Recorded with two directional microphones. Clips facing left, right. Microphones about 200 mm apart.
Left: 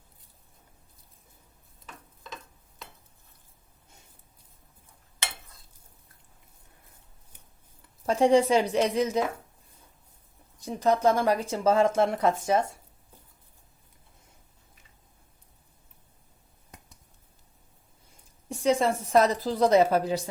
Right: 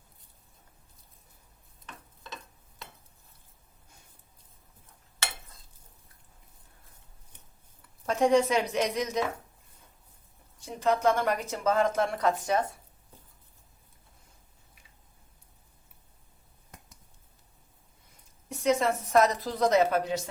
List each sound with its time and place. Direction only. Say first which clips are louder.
8.0 s a woman's voice: left 3 dB; 30° left (ahead or behind)
10.8 s speech: left 2 dB; 35° left (ahead or behind)
18.4 s a woman's voice: left 2 dB; 30° left (ahead or behind)